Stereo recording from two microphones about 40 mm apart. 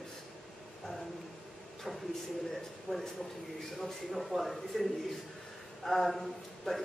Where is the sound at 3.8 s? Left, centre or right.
Centre.